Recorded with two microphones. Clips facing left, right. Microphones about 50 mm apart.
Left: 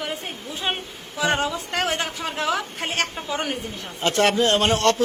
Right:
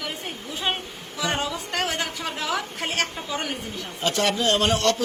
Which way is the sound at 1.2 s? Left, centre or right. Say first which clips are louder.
Left 4 dB; left.